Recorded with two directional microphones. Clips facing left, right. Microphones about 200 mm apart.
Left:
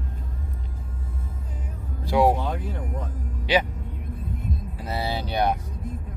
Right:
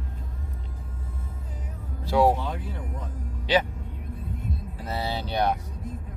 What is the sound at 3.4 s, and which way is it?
Speech, 10° left (ahead or behind).